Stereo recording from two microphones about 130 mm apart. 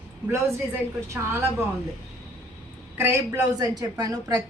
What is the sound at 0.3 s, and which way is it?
A woman's voice, 20° right (ahead or behind).